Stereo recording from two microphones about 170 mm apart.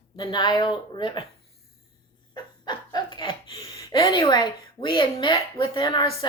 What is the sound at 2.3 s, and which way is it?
Laughter, 25° left (ahead or behind).